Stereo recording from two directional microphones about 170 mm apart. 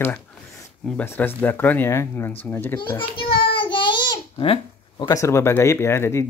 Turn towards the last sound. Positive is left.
turn(degrees=15)  # may be behind; listen again after turning